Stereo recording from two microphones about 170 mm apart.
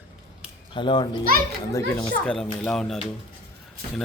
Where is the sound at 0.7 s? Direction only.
30° left (ahead or behind).